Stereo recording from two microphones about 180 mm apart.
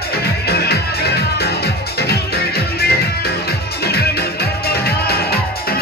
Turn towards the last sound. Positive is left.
turn(degrees=60)  # may be behind; listen again after turning